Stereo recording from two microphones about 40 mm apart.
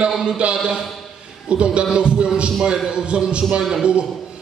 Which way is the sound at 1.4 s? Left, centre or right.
Right.